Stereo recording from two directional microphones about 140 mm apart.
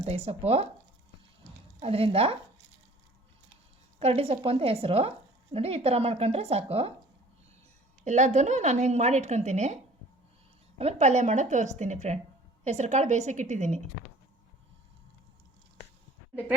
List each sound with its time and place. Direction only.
0.0 s a woman's voice: 50° right (ahead or behind)
1.8 s a woman's voice: 45° right (ahead or behind)
4.0 s a woman's voice: 45° right (ahead or behind)
8.0 s a woman's voice: 55° right (ahead or behind)
10.8 s a woman's voice: 50° right (ahead or behind)